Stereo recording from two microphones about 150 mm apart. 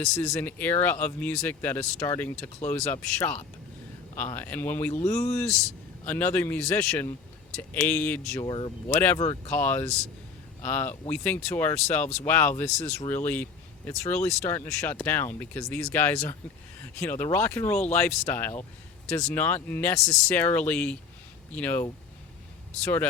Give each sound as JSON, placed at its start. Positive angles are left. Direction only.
{"t": 0.1, "sound": "speech", "side_deg": 5}
{"t": 4.4, "sound": "speech", "side_deg": 10}
{"t": 8.4, "sound": "speech", "side_deg": 35}
{"t": 9.5, "sound": "speech", "side_deg": 10}